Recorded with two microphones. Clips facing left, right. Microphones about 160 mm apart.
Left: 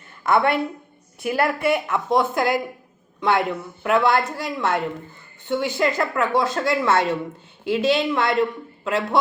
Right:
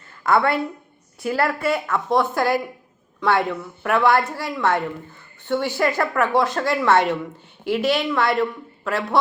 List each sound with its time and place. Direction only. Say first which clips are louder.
0.3 s a woman's voice: even; 20° left (ahead or behind)